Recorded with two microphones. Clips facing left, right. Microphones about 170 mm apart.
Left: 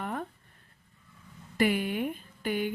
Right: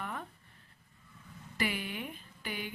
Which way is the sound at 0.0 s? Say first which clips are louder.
Left 6 dB; 50° left (ahead or behind).